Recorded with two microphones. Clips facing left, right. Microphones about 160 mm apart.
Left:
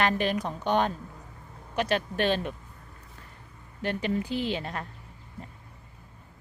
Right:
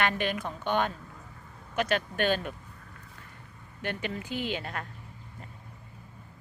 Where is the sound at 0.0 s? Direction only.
35° left (ahead or behind).